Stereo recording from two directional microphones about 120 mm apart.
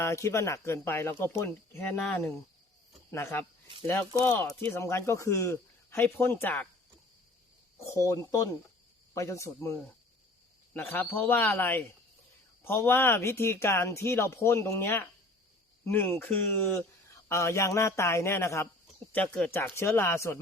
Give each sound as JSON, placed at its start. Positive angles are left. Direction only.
{"t": 0.0, "sound": "speech", "side_deg": 25}
{"t": 3.1, "sound": "speech", "side_deg": 20}
{"t": 4.6, "sound": "speech", "side_deg": 20}
{"t": 7.9, "sound": "speech", "side_deg": 25}
{"t": 10.8, "sound": "speech", "side_deg": 15}
{"t": 19.1, "sound": "speech", "side_deg": 10}